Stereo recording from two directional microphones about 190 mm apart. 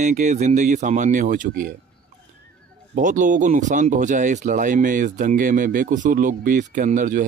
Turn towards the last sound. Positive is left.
turn(degrees=-45)  # may be behind; listen again after turning